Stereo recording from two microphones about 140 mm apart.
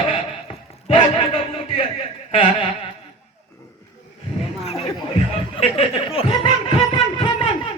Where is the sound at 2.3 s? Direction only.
40° left (ahead or behind).